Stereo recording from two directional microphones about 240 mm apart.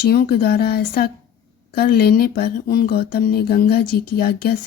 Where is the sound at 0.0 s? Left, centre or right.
Left.